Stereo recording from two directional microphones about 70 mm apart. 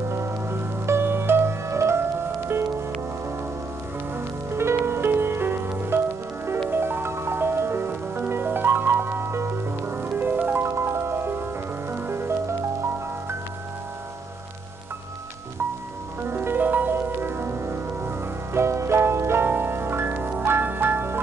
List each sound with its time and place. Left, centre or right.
0.1 s music: right
4.5 s music: right
9.9 s music: right
10.6 s music: right
16.3 s music: right